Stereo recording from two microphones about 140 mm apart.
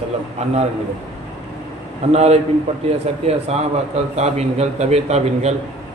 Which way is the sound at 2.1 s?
50° right (ahead or behind).